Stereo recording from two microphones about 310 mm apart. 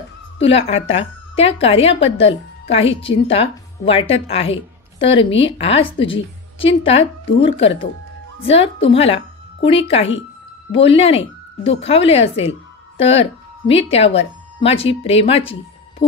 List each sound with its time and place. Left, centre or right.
0.4 s a woman's voice: centre